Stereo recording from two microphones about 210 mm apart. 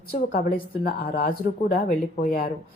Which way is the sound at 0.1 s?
45° left (ahead or behind).